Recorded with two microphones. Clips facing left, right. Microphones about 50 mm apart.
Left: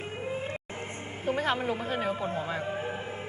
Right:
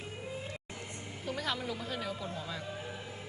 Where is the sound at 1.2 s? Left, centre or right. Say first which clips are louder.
Left 8 dB; left.